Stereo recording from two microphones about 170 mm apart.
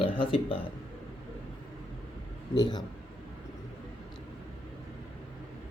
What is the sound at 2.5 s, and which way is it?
Speech, 25° left (ahead or behind).